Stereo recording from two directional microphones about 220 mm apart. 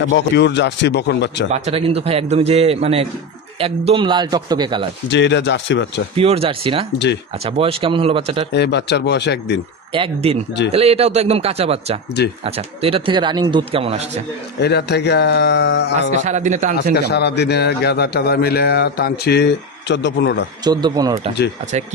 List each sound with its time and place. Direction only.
0.1 s a man's voice: 55° left (ahead or behind)
1.5 s a man's voice: 25° right (ahead or behind)
5.1 s a man's voice: 55° left (ahead or behind)
6.1 s a man's voice: 25° right (ahead or behind)
8.5 s a man's voice: 50° left (ahead or behind)
9.9 s a man's voice: 25° right (ahead or behind)
14.6 s a man's voice: 50° left (ahead or behind)
16.3 s speech: 35° right (ahead or behind)
16.9 s a man's voice: 50° left (ahead or behind)
20.6 s a man's voice: 20° right (ahead or behind)